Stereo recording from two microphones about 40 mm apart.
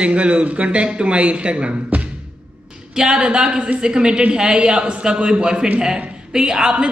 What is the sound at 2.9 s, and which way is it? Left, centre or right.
A woman's voice, centre.